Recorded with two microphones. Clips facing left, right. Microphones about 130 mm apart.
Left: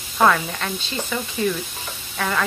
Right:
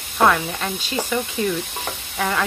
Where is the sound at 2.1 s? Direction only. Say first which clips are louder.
Right 1 dB; 5° right (ahead or behind).